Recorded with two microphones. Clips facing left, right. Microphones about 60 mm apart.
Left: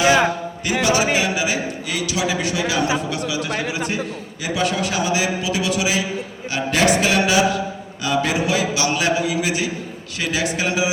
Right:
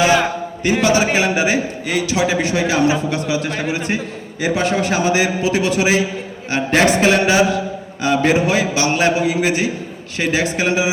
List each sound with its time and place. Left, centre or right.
0.6 s a man's voice: right